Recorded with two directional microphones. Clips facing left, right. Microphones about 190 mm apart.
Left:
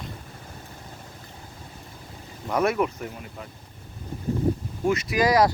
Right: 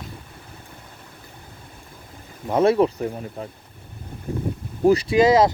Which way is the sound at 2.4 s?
25° right (ahead or behind).